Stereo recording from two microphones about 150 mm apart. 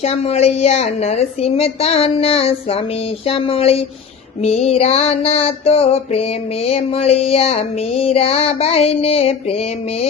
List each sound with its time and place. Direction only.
0.0 s a woman's voice: 45° left (ahead or behind)
3.2 s music: 40° left (ahead or behind)